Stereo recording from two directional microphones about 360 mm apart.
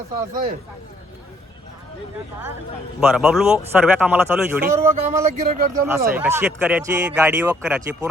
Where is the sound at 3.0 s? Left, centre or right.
Centre.